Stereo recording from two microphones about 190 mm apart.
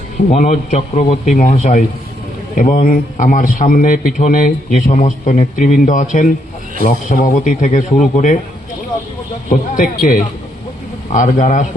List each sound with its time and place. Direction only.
0.3 s a man's voice: 40° left (ahead or behind)
9.5 s a man's voice: 45° left (ahead or behind)